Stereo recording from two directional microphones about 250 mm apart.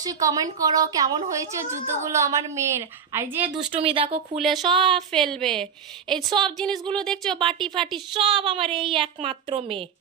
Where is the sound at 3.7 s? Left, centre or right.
Right.